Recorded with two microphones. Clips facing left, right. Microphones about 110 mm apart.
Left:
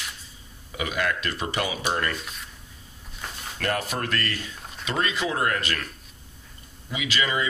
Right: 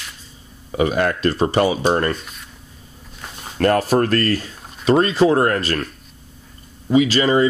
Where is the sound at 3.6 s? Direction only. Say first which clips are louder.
Right 12 dB; 40° right (ahead or behind).